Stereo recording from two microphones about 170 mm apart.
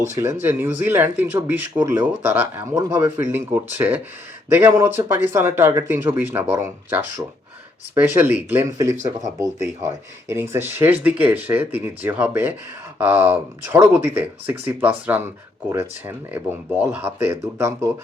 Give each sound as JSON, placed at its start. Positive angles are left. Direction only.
{"t": 0.2, "sound": "speech", "side_deg": -15}